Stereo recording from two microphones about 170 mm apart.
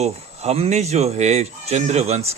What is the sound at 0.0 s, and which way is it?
Speech, 40° right (ahead or behind).